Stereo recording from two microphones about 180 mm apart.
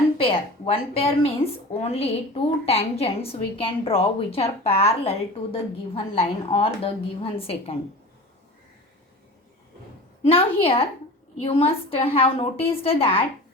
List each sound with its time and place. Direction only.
0.2 s a woman's voice: 30° left (ahead or behind)
10.2 s a woman's voice: 30° left (ahead or behind)